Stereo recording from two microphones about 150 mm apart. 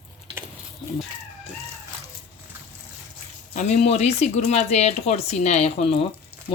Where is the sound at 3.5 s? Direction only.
55° left (ahead or behind).